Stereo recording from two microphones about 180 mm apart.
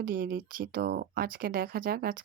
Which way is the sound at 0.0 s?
55° right (ahead or behind).